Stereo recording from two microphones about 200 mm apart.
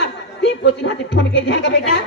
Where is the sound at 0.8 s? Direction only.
65° left (ahead or behind).